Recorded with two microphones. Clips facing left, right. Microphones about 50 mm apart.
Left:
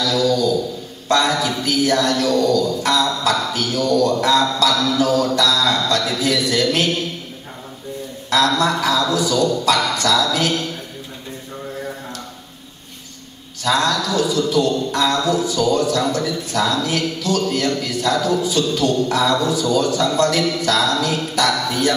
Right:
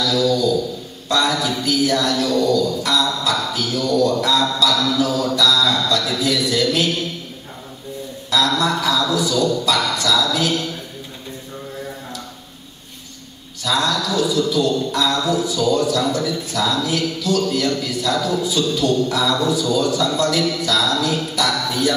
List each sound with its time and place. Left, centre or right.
0.0 s a man's voice: left
8.3 s a man's voice: left
9.7 s a woman's voice: left
13.6 s a man's voice: left